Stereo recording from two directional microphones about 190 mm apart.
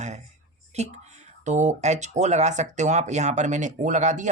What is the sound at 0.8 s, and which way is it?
Speech, 35° right (ahead or behind).